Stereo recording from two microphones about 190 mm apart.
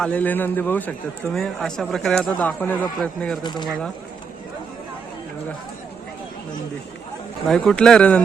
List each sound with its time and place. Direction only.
0.0 s a man's voice: 10° left (ahead or behind)
3.4 s speech: 25° left (ahead or behind)
7.4 s speech: centre (ahead or behind)